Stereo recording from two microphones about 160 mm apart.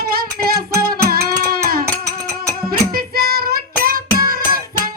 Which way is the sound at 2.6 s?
70° right (ahead or behind).